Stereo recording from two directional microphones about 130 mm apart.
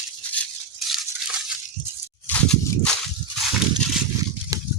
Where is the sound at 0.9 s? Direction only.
5° right (ahead or behind).